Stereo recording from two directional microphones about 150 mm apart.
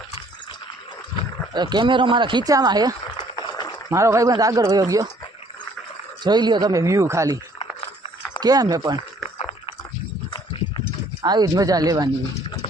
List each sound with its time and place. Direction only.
1.5 s speech: 30° right (ahead or behind)
3.3 s a sound: 25° left (ahead or behind)
3.8 s speech: 20° right (ahead or behind)
6.2 s speech: 30° right (ahead or behind)
8.4 s speech: 25° right (ahead or behind)
9.4 s a sound: 40° left (ahead or behind)
10.3 s clip-clop: 30° left (ahead or behind)
11.2 s speech: 25° right (ahead or behind)